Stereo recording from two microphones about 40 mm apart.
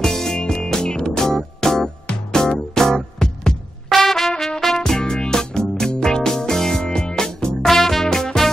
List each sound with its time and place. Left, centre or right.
0.0 s music: centre
3.9 s trumpet: centre
4.6 s music: centre
4.8 s music: centre